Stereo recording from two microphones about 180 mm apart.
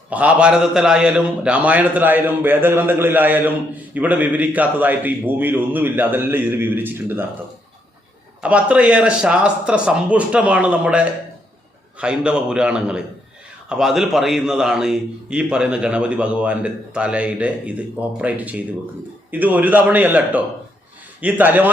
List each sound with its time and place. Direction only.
0.1 s a man's voice: 10° right (ahead or behind)
8.4 s a man's voice: 5° right (ahead or behind)